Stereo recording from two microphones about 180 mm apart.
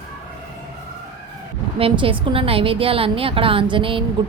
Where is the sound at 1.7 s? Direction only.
30° right (ahead or behind).